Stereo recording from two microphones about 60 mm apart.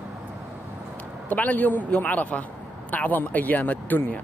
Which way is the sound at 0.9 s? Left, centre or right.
Left.